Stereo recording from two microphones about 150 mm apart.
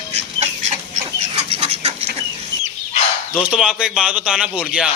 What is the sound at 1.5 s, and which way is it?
Chicken, 40° right (ahead or behind).